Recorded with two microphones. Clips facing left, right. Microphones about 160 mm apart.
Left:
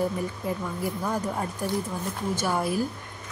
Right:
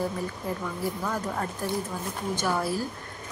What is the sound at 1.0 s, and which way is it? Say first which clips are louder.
Speech: left 2 dB; 10° left (ahead or behind).